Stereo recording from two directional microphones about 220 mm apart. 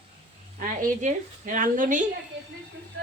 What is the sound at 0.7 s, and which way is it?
A woman's voice, 35° right (ahead or behind).